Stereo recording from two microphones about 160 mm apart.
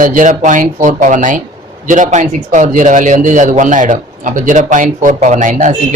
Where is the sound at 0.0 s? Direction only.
55° right (ahead or behind).